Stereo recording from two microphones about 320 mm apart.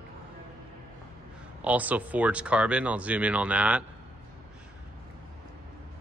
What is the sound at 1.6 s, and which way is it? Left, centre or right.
Speech, centre.